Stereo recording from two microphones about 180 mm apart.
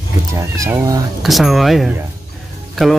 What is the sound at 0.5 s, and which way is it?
Speech, 15° right (ahead or behind).